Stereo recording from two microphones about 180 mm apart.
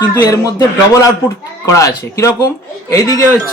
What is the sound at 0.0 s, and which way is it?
Speech, 20° left (ahead or behind).